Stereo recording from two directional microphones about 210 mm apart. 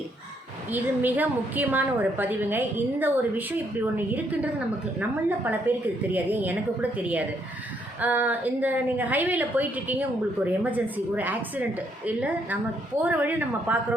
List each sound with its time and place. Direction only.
0.7 s a woman's voice: 10° right (ahead or behind)
5.5 s a woman's voice: 10° right (ahead or behind)